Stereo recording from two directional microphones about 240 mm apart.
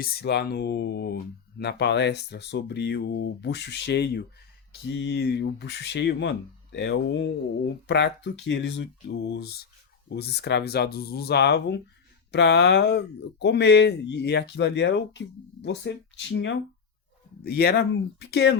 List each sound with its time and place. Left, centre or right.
0.0 s speech: left